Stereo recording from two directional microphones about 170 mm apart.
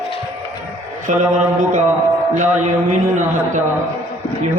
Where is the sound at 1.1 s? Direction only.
50° right (ahead or behind).